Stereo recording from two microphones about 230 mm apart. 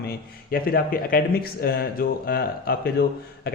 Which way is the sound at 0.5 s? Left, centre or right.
Left.